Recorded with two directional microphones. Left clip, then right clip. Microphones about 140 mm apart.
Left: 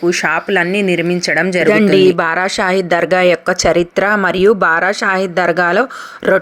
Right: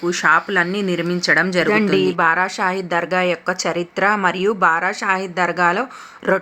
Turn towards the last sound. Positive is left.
turn(degrees=35)  # may be behind; listen again after turning